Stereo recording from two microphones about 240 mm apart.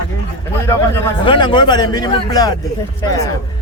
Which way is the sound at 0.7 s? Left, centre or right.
Centre.